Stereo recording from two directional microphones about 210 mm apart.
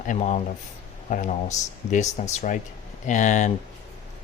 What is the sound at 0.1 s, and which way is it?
Speech, 35° left (ahead or behind).